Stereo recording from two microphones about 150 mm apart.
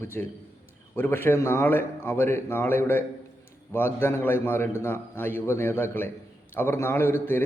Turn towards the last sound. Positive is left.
turn(degrees=15)  # may be behind; listen again after turning